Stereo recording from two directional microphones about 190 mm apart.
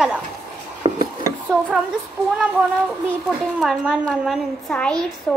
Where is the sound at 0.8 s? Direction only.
25° right (ahead or behind).